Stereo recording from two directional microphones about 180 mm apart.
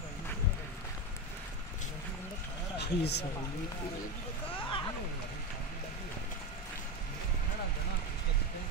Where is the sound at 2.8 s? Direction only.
70° left (ahead or behind).